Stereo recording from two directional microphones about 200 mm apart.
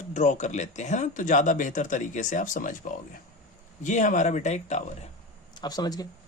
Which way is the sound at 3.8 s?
40° left (ahead or behind).